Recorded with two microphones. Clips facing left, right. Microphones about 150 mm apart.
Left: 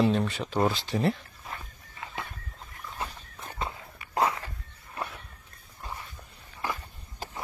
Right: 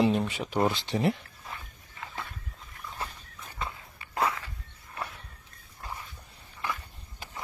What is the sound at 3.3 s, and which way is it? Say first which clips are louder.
Walk: left 5 dB; 60° left (ahead or behind).